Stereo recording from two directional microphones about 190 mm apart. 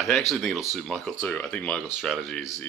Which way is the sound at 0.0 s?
Centre (ahead or behind).